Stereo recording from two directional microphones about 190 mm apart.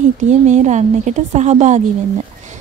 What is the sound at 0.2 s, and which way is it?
Speech, 40° right (ahead or behind).